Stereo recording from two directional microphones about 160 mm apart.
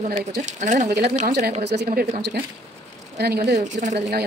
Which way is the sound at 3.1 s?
85° right.